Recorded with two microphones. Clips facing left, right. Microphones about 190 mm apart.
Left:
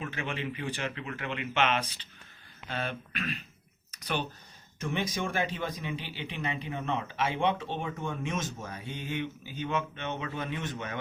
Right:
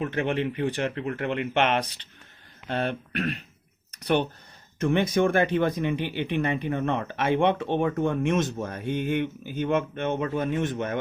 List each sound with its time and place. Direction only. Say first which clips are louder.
0.0 s speech: right 9 dB; 60° right (ahead or behind)